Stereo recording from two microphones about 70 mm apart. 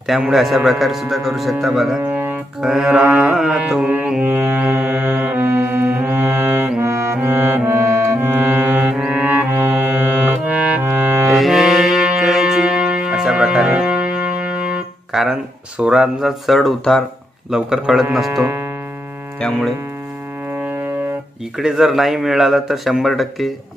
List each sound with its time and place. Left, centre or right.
0.0 s speech: centre
2.0 s music: right
2.6 s speech: centre
3.8 s music: centre
6.8 s music: right
7.2 s music: right
9.0 s music: centre
10.8 s music: right
11.3 s music: centre
15.1 s speech: centre
17.5 s speech: centre
21.5 s speech: centre